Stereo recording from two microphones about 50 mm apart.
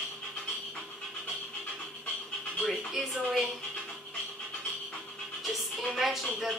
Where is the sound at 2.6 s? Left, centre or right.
Centre.